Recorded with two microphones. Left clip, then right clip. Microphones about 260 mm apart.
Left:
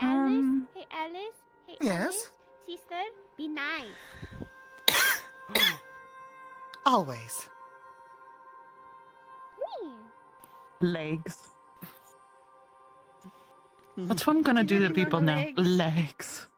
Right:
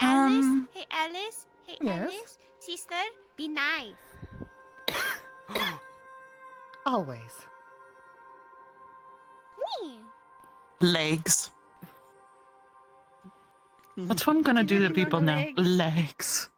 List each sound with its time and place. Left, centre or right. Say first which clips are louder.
0.0 s music: right 4 dB; right
1.8 s speech: left 2 dB; left
2.6 s speech: right 3 dB; right; by 3.9 s centre
3.9 s music: left 3 dB; left; by 5.8 s centre
6.7 s speech: left 4 dB; left
9.6 s speech: right 3 dB; right
13.9 s speech: right 1 dB; centre